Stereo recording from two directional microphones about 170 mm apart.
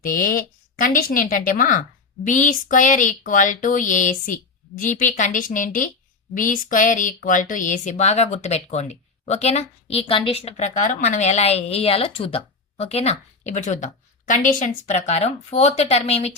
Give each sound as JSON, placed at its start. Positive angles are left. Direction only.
{"t": 0.0, "sound": "a woman's voice", "side_deg": 55}
{"t": 10.4, "sound": "speech", "side_deg": 45}